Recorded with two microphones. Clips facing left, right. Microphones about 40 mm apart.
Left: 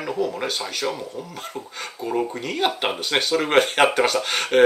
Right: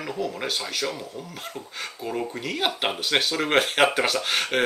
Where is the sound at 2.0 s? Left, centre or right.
Centre.